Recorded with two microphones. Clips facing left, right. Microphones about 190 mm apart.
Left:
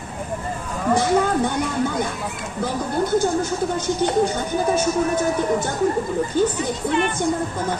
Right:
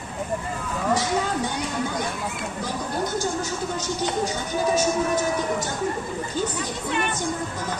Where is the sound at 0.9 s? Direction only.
55° left (ahead or behind).